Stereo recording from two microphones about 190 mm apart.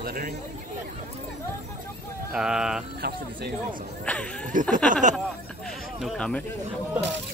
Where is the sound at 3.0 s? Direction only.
55° right (ahead or behind).